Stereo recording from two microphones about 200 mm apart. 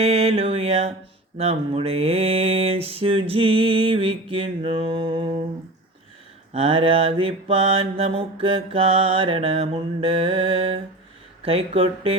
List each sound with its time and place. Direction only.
0.0 s mantra: 30° right (ahead or behind)
6.5 s mantra: 30° right (ahead or behind)